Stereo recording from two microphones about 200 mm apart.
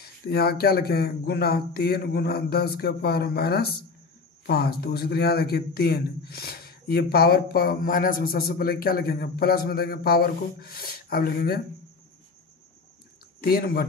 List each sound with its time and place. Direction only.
0.0 s speech: 50° left (ahead or behind)
13.4 s speech: 50° left (ahead or behind)